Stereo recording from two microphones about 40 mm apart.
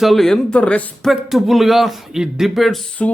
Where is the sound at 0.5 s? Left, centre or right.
Left.